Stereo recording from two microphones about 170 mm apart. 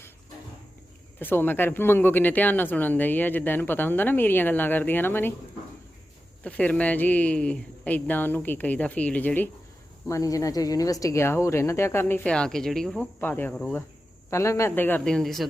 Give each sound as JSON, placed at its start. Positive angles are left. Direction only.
{"t": 1.2, "sound": "speech", "side_deg": 10}
{"t": 6.4, "sound": "speech", "side_deg": 10}